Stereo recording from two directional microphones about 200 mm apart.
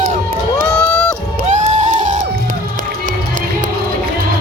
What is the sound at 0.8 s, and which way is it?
Cheering, 5° left (ahead or behind).